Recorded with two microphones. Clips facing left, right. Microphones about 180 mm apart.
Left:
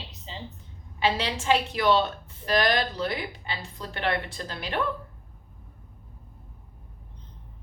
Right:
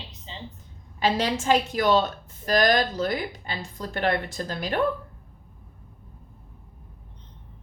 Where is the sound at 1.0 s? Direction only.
45° right (ahead or behind).